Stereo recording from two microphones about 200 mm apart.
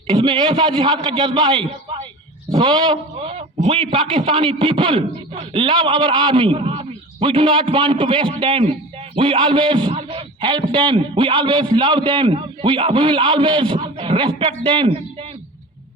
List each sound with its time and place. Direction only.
0.2 s a man's voice: 20° right (ahead or behind)